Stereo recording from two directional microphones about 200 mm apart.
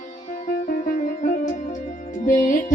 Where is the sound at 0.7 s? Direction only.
40° left (ahead or behind).